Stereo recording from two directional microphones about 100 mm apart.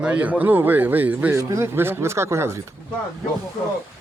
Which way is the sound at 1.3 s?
30° right (ahead or behind).